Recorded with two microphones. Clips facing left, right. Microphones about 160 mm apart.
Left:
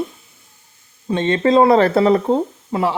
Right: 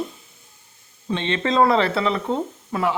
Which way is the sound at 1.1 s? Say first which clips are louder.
Left 7 dB; 40° left (ahead or behind).